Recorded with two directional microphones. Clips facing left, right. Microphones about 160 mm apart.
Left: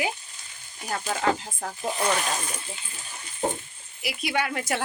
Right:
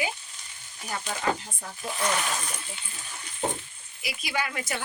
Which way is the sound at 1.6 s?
80° left.